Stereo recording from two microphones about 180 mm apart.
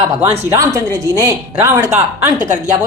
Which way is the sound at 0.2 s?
35° right (ahead or behind).